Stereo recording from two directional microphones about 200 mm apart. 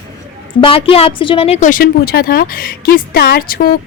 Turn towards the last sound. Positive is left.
turn(degrees=50)  # may be behind; listen again after turning